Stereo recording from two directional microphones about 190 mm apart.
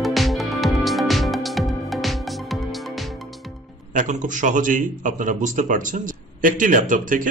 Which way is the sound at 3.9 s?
40° right (ahead or behind).